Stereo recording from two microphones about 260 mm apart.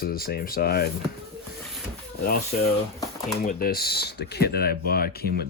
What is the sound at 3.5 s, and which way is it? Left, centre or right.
Speech, left.